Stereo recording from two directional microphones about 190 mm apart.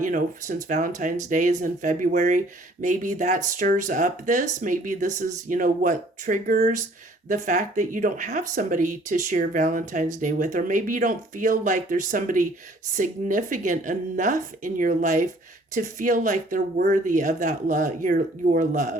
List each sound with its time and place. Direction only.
0.0 s speech: 45° right (ahead or behind)